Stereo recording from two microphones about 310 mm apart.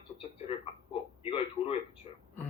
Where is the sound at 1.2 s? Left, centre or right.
Centre.